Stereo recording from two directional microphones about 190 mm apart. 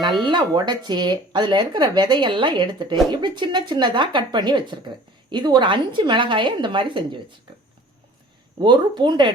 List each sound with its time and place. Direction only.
0.3 s speech: 20° right (ahead or behind)
8.5 s speech: 25° right (ahead or behind)